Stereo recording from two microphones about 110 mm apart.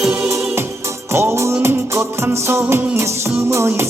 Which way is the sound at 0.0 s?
10° right (ahead or behind).